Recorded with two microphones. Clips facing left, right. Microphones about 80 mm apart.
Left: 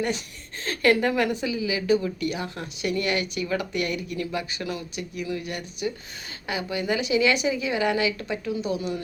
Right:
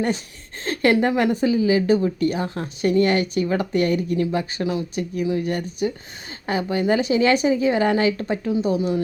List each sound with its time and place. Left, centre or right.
0.6 s a woman's voice: right